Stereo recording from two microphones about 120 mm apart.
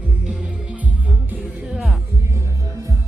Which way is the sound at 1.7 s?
Centre (ahead or behind).